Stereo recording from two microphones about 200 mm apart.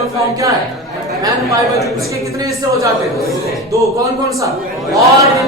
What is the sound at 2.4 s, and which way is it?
A man's voice, 15° right (ahead or behind).